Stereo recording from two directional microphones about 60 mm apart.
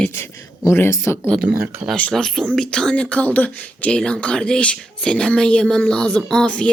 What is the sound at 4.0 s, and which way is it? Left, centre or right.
Speech, centre.